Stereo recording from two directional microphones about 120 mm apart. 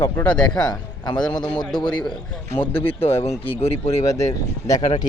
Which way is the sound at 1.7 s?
40° left (ahead or behind).